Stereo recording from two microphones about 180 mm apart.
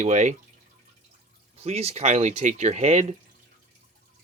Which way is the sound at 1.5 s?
35° right (ahead or behind).